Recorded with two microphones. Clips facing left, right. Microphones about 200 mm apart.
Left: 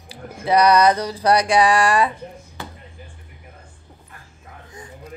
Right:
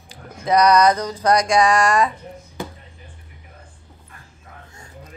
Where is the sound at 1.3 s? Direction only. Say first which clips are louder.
Even; 30° left (ahead or behind).